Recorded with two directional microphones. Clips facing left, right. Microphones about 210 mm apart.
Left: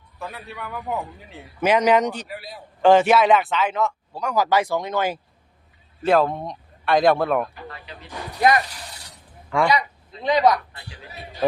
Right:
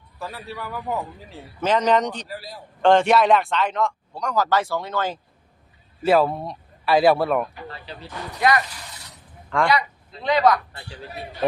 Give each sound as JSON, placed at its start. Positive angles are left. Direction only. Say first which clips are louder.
{"t": 0.2, "sound": "a man's voice", "louder": "right 1 dB", "side_deg": 0}
{"t": 1.6, "sound": "a man's voice", "louder": "left 2 dB", "side_deg": 10}
{"t": 6.0, "sound": "speech", "louder": "even", "side_deg": -5}
{"t": 7.7, "sound": "vehicle", "louder": "right 2 dB", "side_deg": -30}
{"t": 9.5, "sound": "a woman's voice", "louder": "left 1 dB", "side_deg": 10}